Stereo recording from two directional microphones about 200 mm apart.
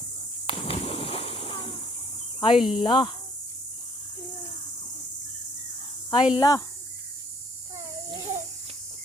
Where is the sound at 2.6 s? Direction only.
Centre (ahead or behind).